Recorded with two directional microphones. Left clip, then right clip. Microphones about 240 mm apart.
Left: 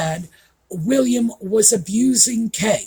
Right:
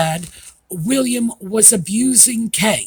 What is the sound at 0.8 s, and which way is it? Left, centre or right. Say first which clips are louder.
Speech: left 1 dB; right.